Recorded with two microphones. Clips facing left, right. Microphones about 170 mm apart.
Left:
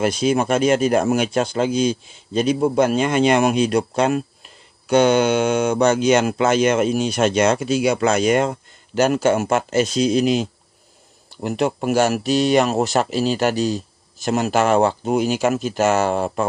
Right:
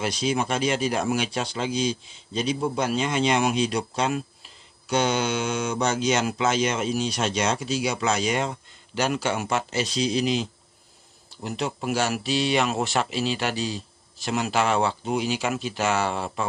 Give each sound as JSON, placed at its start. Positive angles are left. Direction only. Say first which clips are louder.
{"t": 0.0, "sound": "speech", "louder": "left 7 dB", "side_deg": 50}